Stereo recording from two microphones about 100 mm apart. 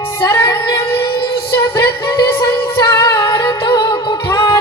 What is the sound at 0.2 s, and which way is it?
Music, 30° left (ahead or behind).